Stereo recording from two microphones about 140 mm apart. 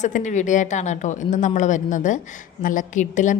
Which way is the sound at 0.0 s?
60° left (ahead or behind).